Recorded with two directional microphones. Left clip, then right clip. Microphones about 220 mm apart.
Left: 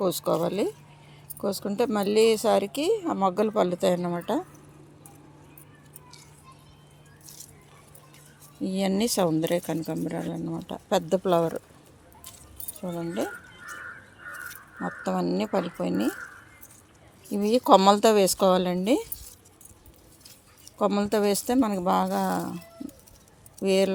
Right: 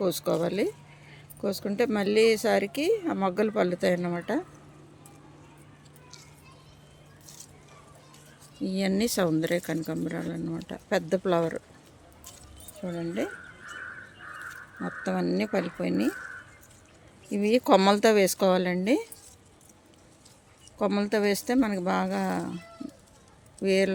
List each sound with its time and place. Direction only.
0.0 s speech: 5° left (ahead or behind)
8.6 s speech: 10° left (ahead or behind)
12.8 s speech: 5° left (ahead or behind)
14.8 s speech: 5° left (ahead or behind)
17.2 s speech: 5° left (ahead or behind)
20.7 s speech: 5° left (ahead or behind)
23.6 s speech: 5° left (ahead or behind)